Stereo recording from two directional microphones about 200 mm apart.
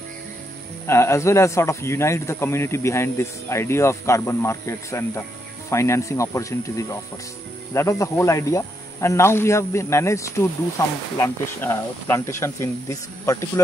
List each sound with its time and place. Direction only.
0.8 s a man's voice: 15° left (ahead or behind)